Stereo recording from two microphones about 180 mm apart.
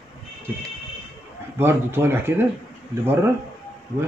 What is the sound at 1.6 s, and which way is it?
Speech, 10° right (ahead or behind).